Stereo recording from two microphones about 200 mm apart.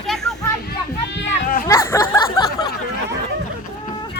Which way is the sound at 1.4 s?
45° left (ahead or behind).